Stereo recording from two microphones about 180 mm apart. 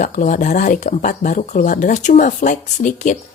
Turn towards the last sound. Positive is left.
turn(degrees=45)  # may be behind; listen again after turning